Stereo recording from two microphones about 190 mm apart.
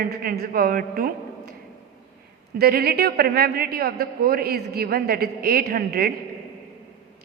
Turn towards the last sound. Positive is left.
turn(degrees=-55)  # may be behind; listen again after turning